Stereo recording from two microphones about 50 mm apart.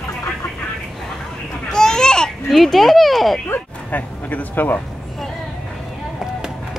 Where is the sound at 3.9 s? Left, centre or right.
Left.